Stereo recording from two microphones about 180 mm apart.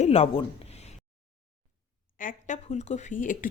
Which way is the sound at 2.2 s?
45° left (ahead or behind).